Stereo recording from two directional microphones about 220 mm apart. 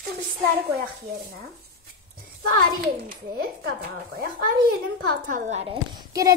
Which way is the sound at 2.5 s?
40° right (ahead or behind).